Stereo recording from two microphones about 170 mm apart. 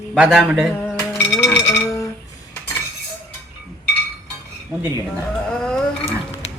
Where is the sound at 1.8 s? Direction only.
20° left (ahead or behind).